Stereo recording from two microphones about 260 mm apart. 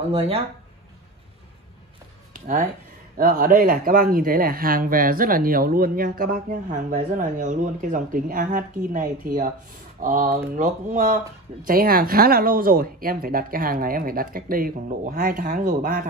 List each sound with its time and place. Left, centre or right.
0.1 s speech: right
3.2 s speech: right